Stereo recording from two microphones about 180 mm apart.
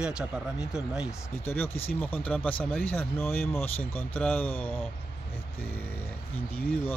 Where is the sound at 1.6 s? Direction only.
35° left (ahead or behind).